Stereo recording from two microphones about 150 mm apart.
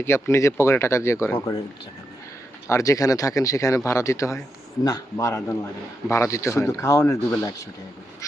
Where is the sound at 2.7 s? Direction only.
20° left (ahead or behind).